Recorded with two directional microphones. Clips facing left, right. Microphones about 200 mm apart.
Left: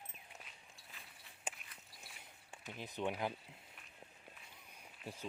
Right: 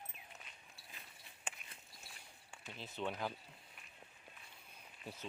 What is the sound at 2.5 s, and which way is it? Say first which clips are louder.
Speech: left 3 dB; 15° left (ahead or behind).